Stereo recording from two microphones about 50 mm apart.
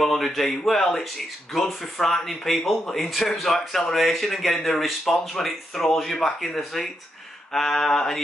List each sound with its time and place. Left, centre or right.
0.0 s speech: centre
7.5 s mantra: centre